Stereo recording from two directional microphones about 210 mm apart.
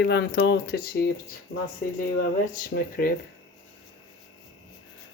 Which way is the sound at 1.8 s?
45° left (ahead or behind).